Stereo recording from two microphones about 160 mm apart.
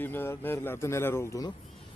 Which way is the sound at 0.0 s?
10° left (ahead or behind).